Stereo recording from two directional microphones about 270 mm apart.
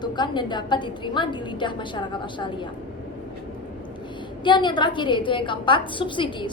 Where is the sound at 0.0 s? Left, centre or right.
Centre.